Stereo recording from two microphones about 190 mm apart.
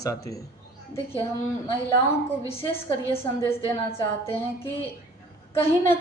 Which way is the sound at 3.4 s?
15° left (ahead or behind).